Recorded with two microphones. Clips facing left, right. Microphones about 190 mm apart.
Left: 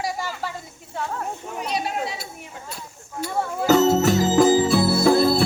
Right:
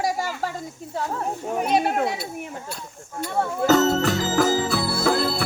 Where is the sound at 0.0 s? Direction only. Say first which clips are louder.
Right 3 dB; 45° right (ahead or behind).